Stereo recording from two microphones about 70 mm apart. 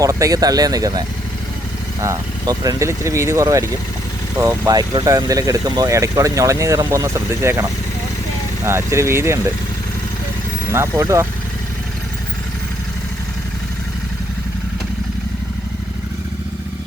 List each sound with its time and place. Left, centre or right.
0.0 s speech: right
4.4 s speech: right
5.3 s speech: right
6.1 s speech: right
10.7 s speech: right